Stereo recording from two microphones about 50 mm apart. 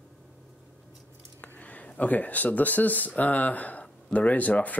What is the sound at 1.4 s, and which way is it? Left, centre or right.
Speech, left.